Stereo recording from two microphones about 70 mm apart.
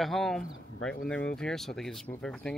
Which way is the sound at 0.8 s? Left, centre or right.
Centre.